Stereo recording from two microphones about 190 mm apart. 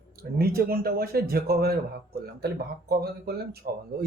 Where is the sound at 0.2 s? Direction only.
50° right (ahead or behind).